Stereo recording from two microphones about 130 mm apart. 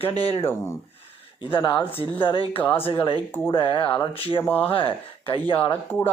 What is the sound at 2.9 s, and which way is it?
Speech, 40° left (ahead or behind).